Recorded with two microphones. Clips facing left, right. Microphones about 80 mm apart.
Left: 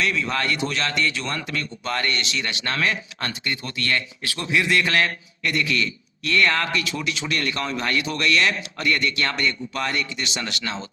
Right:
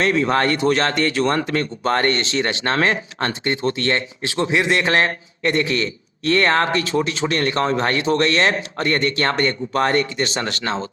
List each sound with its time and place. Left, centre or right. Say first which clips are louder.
0.0 s speech: right 7 dB; right